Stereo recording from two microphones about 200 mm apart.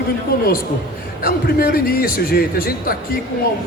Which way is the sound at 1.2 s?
50° left (ahead or behind).